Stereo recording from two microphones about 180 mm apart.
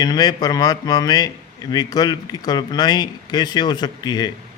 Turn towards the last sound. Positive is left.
turn(degrees=25)  # may be behind; listen again after turning